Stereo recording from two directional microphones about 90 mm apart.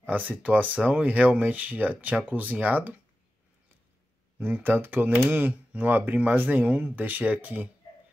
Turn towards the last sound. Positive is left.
turn(degrees=-15)  # may be behind; listen again after turning